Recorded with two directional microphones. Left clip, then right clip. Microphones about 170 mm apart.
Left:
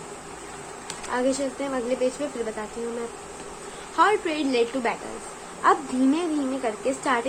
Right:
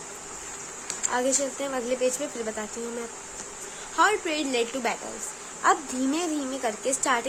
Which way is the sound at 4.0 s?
5° right (ahead or behind).